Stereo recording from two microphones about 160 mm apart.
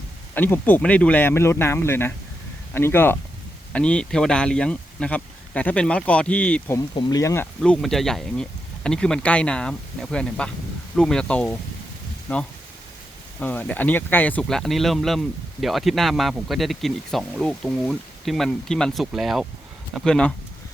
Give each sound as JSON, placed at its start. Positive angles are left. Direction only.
{"t": 0.3, "sound": "speech", "side_deg": 10}
{"t": 6.7, "sound": "speech", "side_deg": 20}
{"t": 7.6, "sound": "speech", "side_deg": 5}